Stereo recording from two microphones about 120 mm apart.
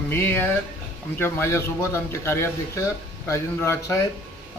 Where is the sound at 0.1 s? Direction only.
20° left (ahead or behind).